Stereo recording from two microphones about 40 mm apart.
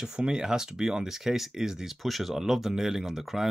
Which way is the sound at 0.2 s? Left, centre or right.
Centre.